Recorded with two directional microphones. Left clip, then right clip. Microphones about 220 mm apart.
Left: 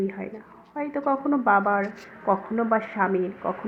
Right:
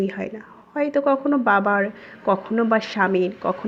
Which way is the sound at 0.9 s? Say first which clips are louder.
Right 4 dB; 20° right (ahead or behind).